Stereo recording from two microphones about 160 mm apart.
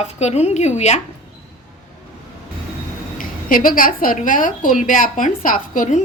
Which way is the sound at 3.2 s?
60° left (ahead or behind).